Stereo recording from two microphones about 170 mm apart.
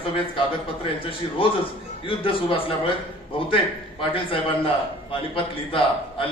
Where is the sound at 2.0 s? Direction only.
30° left (ahead or behind).